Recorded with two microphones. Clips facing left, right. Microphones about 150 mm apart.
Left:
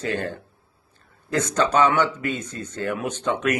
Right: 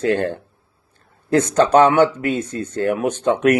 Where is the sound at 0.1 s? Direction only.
45° right (ahead or behind).